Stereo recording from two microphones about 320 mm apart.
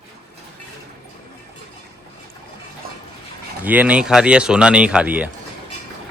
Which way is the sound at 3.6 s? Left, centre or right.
Centre.